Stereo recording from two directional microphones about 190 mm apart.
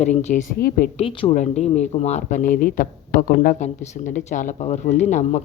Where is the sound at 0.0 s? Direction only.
40° left (ahead or behind).